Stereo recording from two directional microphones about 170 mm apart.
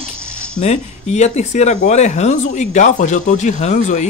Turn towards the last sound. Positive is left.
turn(degrees=45)  # may be behind; listen again after turning